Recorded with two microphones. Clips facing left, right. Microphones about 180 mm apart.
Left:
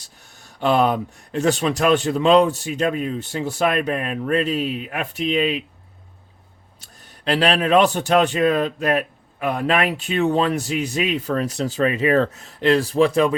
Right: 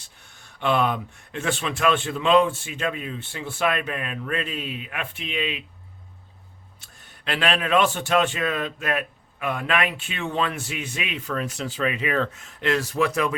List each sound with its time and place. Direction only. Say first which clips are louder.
0.3 s a man's voice: left 4 dB; 40° left (ahead or behind)
6.7 s a man's voice: left 8 dB; 40° left (ahead or behind)